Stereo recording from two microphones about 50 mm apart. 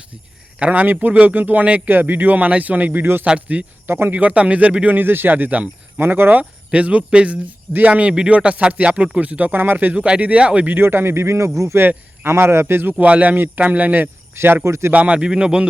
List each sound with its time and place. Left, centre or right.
0.6 s speech: right
3.8 s speech: right
4.1 s speech: right
4.9 s speech: right
6.0 s speech: right
6.7 s speech: right
10.7 s a man's voice: right
11.8 s speech: right
12.9 s speech: right
14.3 s speech: right
14.6 s a man's voice: right
14.9 s speech: right